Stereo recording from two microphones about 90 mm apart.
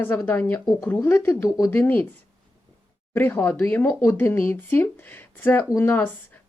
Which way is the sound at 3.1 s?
20° left (ahead or behind).